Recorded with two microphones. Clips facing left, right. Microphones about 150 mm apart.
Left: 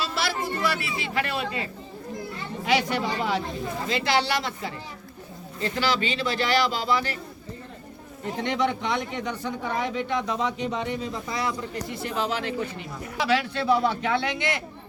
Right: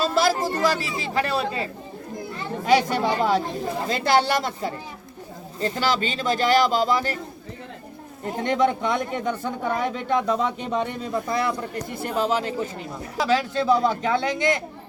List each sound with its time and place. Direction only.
0.0 s speech: 45° right (ahead or behind)
2.6 s speech: 45° right (ahead or behind)
8.2 s speech: 45° right (ahead or behind)